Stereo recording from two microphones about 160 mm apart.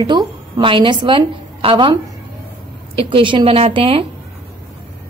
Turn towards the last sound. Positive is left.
turn(degrees=-35)  # may be behind; listen again after turning